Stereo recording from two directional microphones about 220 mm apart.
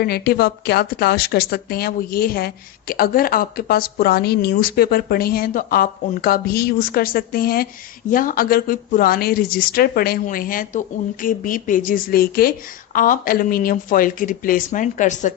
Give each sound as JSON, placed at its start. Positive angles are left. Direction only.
{"t": 0.0, "sound": "a woman's voice", "side_deg": 45}